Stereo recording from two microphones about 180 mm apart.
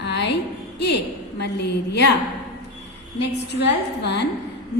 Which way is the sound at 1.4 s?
65° left (ahead or behind).